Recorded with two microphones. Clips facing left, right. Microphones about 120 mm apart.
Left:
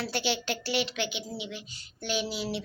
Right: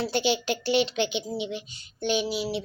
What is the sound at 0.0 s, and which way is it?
A woman's voice, 20° right (ahead or behind).